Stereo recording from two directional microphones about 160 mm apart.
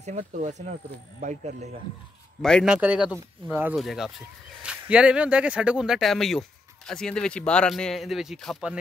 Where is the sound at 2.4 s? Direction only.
5° left (ahead or behind).